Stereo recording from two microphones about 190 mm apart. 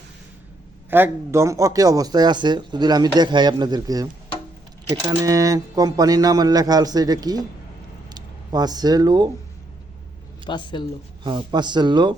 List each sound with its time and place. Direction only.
0.9 s speech: 10° right (ahead or behind)
10.4 s speech: 25° left (ahead or behind)
11.2 s speech: 25° right (ahead or behind)